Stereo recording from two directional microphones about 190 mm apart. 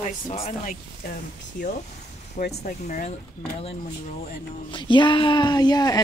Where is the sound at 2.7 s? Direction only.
45° left (ahead or behind).